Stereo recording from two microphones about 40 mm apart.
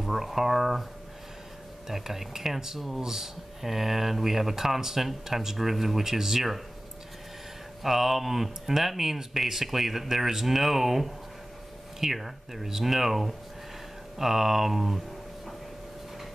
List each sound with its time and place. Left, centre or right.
0.0 s speech: centre
1.9 s speech: centre
7.8 s speech: centre